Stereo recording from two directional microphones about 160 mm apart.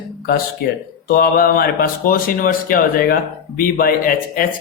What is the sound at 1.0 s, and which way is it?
Speech, 65° left (ahead or behind).